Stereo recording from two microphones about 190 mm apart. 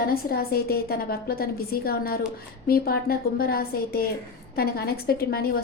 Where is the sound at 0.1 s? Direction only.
55° left (ahead or behind).